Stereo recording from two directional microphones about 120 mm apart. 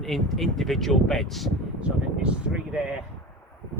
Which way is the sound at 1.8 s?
10° right (ahead or behind).